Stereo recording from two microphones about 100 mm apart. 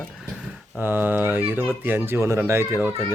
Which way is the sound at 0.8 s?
20° right (ahead or behind).